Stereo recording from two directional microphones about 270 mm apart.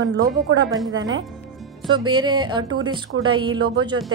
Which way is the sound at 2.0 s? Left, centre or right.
Centre.